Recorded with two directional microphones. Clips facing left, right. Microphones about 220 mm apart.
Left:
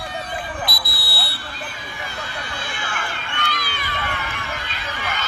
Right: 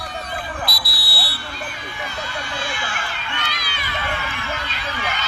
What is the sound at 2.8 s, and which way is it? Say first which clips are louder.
Run: even; 55° left (ahead or behind).